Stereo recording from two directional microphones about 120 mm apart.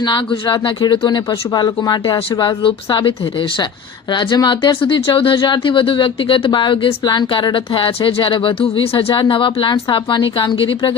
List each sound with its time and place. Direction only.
0.0 s speech: 40° left (ahead or behind)